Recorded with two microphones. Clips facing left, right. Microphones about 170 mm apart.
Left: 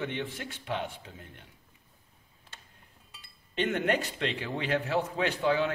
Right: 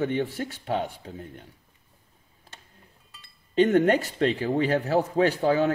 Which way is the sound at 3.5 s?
40° right (ahead or behind).